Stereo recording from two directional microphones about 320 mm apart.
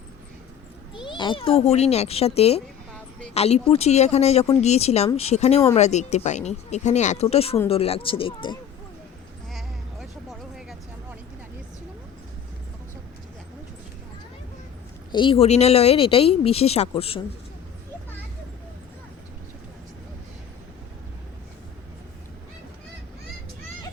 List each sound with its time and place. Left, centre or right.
0.9 s speech: centre
9.5 s a sound: centre
15.1 s speech: centre